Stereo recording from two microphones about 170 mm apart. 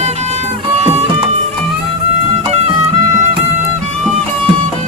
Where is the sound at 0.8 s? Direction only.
40° right (ahead or behind).